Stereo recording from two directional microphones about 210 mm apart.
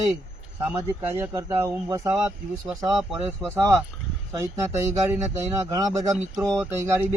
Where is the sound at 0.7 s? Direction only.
10° right (ahead or behind).